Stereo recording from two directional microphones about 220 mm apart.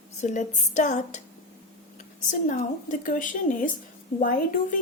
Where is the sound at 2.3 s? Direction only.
35° left (ahead or behind).